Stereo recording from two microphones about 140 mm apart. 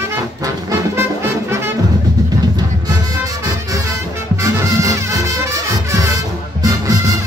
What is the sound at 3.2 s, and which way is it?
Music, 25° right (ahead or behind).